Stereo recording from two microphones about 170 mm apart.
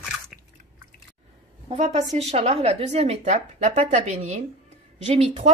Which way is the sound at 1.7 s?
40° right (ahead or behind).